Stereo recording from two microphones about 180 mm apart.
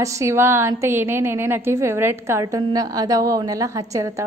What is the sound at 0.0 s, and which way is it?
A woman's voice, 15° right (ahead or behind).